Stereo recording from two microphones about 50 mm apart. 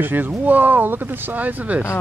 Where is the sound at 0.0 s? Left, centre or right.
Right.